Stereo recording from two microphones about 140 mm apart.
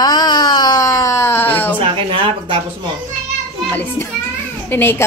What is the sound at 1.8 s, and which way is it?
Speech, 40° right (ahead or behind).